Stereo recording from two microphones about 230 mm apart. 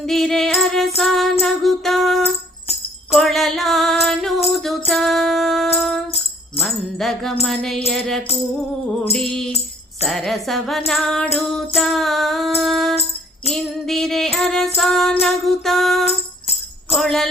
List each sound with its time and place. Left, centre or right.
0.0 s music: centre